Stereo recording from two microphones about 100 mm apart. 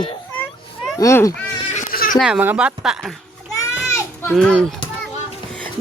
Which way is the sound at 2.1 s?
5° right (ahead or behind).